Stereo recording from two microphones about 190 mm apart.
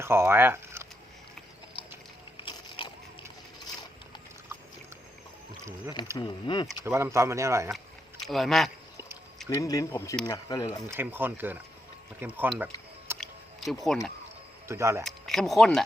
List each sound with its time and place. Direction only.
0.0 s speech: 15° right (ahead or behind)
2.4 s a sound: 25° left (ahead or behind)
6.1 s speech: 25° left (ahead or behind)
6.8 s speech: 15° right (ahead or behind)
8.3 s speech: centre (ahead or behind)
9.6 s speech: 15° left (ahead or behind)
10.8 s speech: 10° right (ahead or behind)
13.1 s a sound: 10° right (ahead or behind)
13.8 s speech: centre (ahead or behind)
14.7 s speech: 15° right (ahead or behind)
15.0 s speech: centre (ahead or behind)